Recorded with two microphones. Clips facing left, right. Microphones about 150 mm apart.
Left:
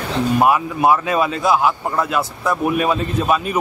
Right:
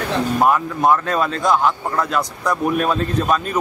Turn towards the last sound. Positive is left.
turn(degrees=10)  # may be behind; listen again after turning